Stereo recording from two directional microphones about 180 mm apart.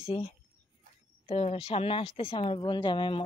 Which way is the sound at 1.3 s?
35° left (ahead or behind).